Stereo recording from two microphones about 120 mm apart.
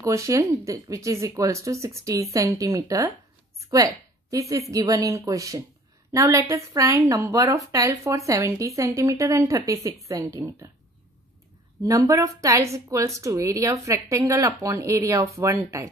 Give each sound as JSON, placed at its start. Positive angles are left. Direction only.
{"t": 0.0, "sound": "a woman's voice", "side_deg": -25}
{"t": 11.8, "sound": "a woman's voice", "side_deg": -30}